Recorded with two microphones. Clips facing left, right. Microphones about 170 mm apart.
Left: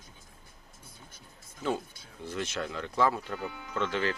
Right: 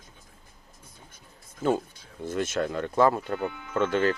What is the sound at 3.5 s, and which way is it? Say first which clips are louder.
Speech: right 2 dB; 35° left (ahead or behind).